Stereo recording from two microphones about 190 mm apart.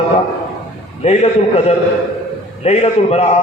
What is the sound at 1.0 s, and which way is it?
A man's voice, 35° left (ahead or behind).